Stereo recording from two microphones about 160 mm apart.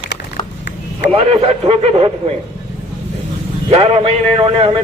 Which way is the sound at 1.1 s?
40° right (ahead or behind).